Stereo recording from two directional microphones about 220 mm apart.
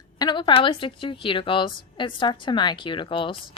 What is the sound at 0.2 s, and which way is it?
A woman's voice, 20° left (ahead or behind).